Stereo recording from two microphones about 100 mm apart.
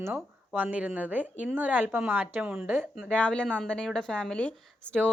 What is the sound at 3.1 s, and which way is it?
A woman's voice, 10° left (ahead or behind).